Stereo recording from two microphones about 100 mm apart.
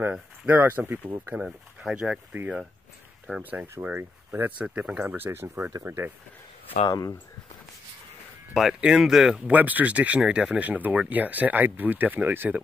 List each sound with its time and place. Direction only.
0.1 s speech: 20° right (ahead or behind)
8.5 s speech: 5° right (ahead or behind)